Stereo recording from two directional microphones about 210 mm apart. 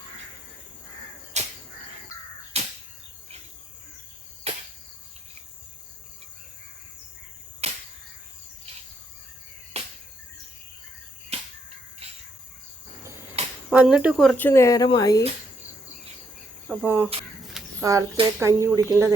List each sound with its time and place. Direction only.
1.3 s crow: 35° right (ahead or behind)
2.5 s a sound: 30° right (ahead or behind)
4.5 s cricket: 30° right (ahead or behind)
7.6 s a sound: 30° right (ahead or behind)
9.7 s cricket: 30° right (ahead or behind)
11.3 s a sound: 30° right (ahead or behind)
13.7 s speech: 5° right (ahead or behind)
14.3 s speech: 10° left (ahead or behind)
16.6 s speech: 10° right (ahead or behind)